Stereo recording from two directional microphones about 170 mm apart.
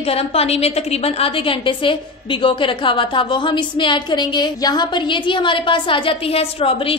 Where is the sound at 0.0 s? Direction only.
35° left (ahead or behind).